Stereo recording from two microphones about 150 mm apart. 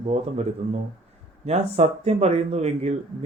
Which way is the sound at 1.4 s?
45° right (ahead or behind).